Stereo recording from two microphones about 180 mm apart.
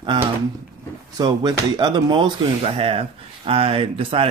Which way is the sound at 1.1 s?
20° right (ahead or behind).